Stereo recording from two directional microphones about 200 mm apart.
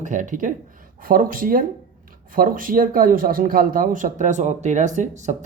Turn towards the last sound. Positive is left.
turn(degrees=-35)  # may be behind; listen again after turning